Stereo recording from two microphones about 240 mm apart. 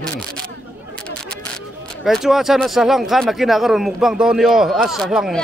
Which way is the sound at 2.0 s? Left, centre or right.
Centre.